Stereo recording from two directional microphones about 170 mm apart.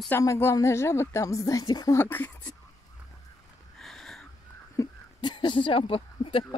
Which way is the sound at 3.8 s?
Centre (ahead or behind).